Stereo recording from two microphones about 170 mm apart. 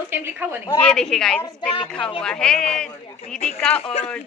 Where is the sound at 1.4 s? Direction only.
30° left (ahead or behind).